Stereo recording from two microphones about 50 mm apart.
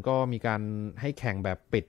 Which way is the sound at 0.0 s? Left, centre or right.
Centre.